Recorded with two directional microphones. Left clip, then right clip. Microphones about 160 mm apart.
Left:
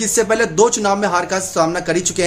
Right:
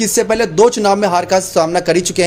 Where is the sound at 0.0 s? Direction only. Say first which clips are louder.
Right 2 dB; 30° right (ahead or behind).